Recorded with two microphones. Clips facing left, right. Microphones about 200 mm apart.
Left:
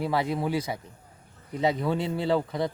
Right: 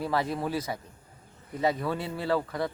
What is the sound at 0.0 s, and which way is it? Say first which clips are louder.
Speech: left 2 dB; 10° left (ahead or behind).